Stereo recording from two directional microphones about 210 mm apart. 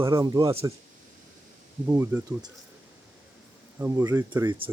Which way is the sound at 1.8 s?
10° right (ahead or behind).